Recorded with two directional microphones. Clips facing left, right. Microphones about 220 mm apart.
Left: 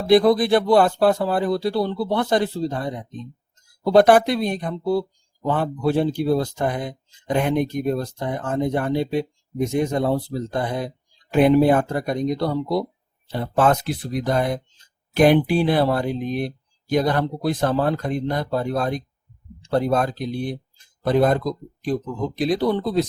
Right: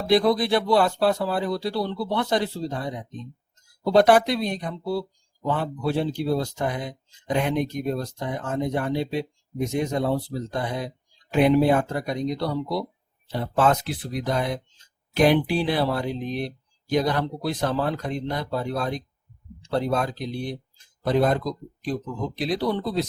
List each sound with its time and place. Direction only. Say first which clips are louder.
0.1 s speech: left 5 dB; 50° left (ahead or behind)
3.9 s speech: left 3 dB; 50° left (ahead or behind)